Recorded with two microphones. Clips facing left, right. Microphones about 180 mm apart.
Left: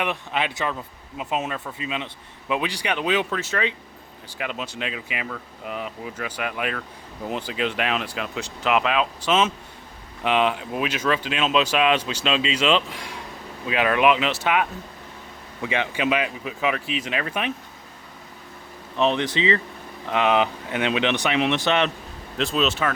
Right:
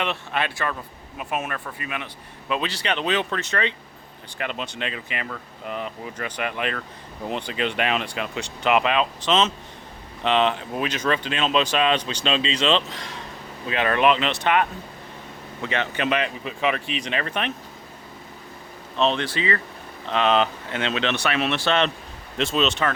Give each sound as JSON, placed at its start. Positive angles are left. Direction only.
{"t": 0.0, "sound": "speech", "side_deg": 15}
{"t": 18.9, "sound": "speech", "side_deg": 15}
{"t": 22.4, "sound": "speech", "side_deg": 0}